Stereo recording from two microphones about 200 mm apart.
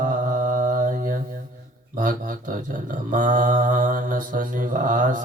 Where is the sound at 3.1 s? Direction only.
40° right (ahead or behind).